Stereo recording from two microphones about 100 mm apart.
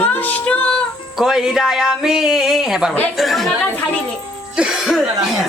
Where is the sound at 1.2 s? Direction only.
5° right (ahead or behind).